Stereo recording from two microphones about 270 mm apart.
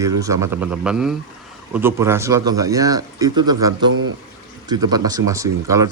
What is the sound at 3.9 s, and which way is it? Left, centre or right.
Speech, right.